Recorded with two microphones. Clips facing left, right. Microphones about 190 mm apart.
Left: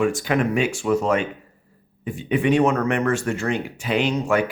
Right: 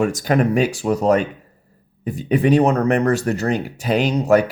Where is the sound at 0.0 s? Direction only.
40° right (ahead or behind).